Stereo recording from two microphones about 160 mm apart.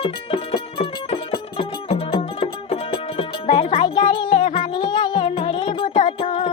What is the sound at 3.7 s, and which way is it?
Music, 30° left (ahead or behind).